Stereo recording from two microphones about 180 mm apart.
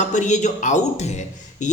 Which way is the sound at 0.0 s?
40° left (ahead or behind).